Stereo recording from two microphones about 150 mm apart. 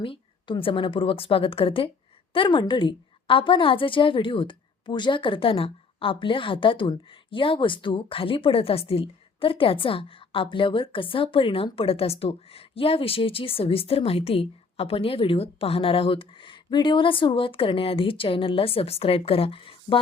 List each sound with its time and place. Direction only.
0.0 s a woman's voice: 35° left (ahead or behind)